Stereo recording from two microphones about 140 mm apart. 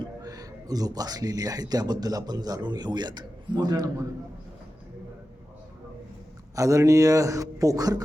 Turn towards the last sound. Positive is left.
turn(degrees=-25)  # may be behind; listen again after turning